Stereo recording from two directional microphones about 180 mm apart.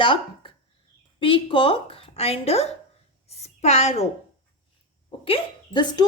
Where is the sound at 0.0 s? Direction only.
30° left (ahead or behind).